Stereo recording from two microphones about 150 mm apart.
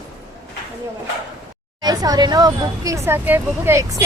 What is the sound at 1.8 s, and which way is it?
Speech, 25° right (ahead or behind).